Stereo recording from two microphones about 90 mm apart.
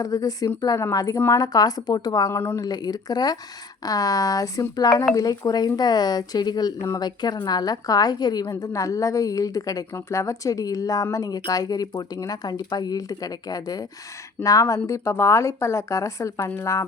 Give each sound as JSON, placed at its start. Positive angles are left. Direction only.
{"t": 0.0, "sound": "a woman's voice", "side_deg": 40}
{"t": 2.3, "sound": "speech", "side_deg": 30}
{"t": 2.6, "sound": "a woman's voice", "side_deg": 50}